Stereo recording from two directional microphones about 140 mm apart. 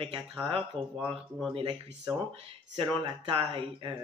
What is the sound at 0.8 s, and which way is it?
Speech, 40° right (ahead or behind).